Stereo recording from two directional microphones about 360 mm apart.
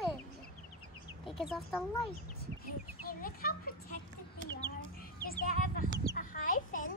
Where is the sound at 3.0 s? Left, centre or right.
Left.